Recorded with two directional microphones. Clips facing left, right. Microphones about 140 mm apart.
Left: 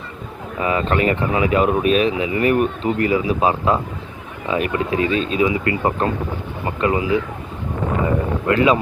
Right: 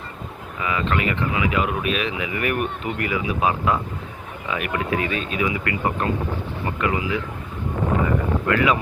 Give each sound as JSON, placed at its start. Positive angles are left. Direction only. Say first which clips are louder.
{"t": 0.6, "sound": "speech", "louder": "left 5 dB", "side_deg": 35}
{"t": 8.4, "sound": "speech", "louder": "left 5 dB", "side_deg": 25}